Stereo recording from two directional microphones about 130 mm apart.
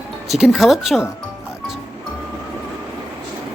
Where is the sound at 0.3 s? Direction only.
5° right (ahead or behind).